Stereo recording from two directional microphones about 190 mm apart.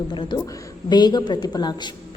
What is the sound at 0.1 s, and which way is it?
Speech, 25° left (ahead or behind).